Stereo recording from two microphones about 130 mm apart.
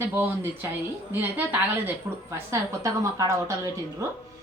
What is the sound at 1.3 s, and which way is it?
A woman's voice, 10° right (ahead or behind).